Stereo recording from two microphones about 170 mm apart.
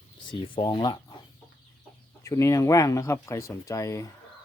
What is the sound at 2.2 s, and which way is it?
Speech, 15° left (ahead or behind).